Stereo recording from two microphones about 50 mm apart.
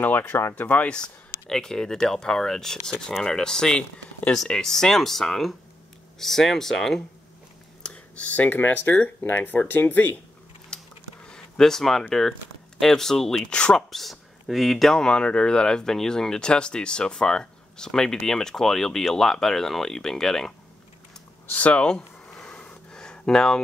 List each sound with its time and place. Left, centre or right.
0.0 s speech: left
0.3 s speech: left
0.6 s speech: left
0.8 s speech: centre
7.8 s speech: left
10.7 s a sound: centre
12.1 s speech: centre
13.5 s speech: left
13.7 s speech: centre
21.5 s speech: left
21.8 s a sound: centre